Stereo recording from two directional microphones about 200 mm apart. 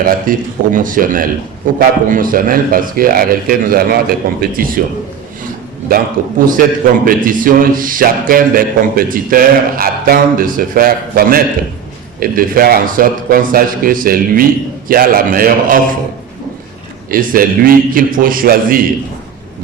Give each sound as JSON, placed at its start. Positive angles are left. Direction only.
{"t": 0.0, "sound": "a man's voice", "side_deg": -45}
{"t": 6.6, "sound": "a man's voice", "side_deg": -45}
{"t": 17.1, "sound": "a man's voice", "side_deg": -45}